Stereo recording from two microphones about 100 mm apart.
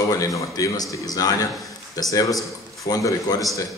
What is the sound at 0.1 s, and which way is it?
A man's voice, 35° left (ahead or behind).